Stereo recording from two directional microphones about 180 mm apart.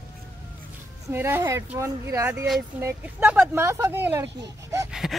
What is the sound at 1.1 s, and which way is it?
Speech, 10° right (ahead or behind).